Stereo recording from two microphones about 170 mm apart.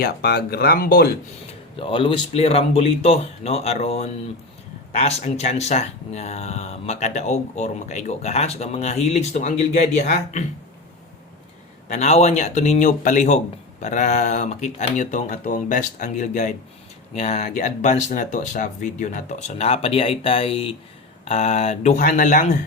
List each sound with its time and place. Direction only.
0.0 s speech: 70° left (ahead or behind)
1.8 s speech: 30° left (ahead or behind)
11.9 s speech: 40° left (ahead or behind)